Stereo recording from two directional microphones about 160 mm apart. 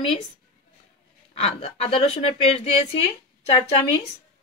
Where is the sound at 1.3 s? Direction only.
40° left (ahead or behind).